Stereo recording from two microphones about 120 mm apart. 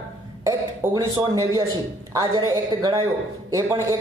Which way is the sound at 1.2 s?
35° right (ahead or behind).